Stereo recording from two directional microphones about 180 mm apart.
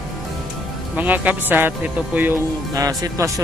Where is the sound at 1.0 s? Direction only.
10° right (ahead or behind).